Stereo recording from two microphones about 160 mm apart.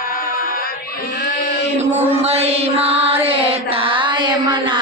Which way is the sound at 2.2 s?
40° right (ahead or behind).